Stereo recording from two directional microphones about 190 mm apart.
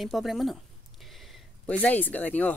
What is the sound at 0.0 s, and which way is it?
Speech, centre (ahead or behind).